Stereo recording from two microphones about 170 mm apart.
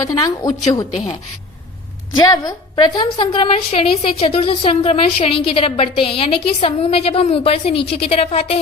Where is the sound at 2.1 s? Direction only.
20° left (ahead or behind).